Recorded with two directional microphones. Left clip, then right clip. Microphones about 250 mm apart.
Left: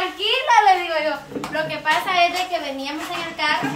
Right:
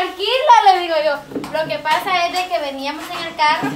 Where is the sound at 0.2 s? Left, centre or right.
Right.